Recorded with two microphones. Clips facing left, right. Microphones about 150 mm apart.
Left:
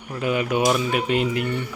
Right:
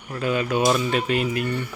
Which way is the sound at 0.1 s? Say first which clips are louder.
Left 1 dB; 15° left (ahead or behind).